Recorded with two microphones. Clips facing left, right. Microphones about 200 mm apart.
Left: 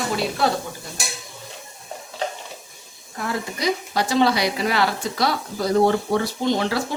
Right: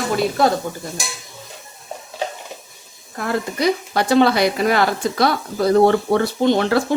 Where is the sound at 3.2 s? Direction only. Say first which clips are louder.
Right 5 dB; 60° right (ahead or behind).